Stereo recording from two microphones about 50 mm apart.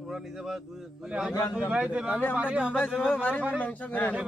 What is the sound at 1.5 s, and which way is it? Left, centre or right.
A man's voice, right.